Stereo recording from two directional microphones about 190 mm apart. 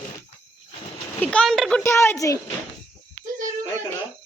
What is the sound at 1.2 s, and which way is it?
Speech, 5° left (ahead or behind).